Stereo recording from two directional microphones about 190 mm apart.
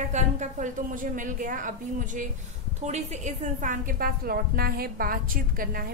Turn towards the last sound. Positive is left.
turn(degrees=-50)  # may be behind; listen again after turning